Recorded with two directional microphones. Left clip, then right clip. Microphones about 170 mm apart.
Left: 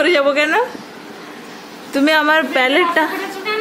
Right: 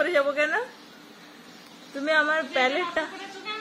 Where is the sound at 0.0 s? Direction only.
20° left (ahead or behind).